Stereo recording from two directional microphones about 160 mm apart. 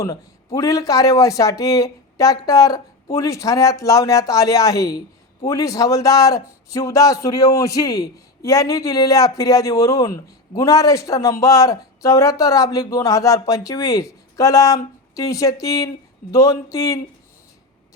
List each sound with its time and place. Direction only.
0.0 s speech: 20° left (ahead or behind)